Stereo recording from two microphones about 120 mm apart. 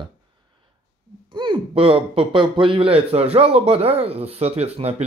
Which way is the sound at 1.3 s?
45° right (ahead or behind).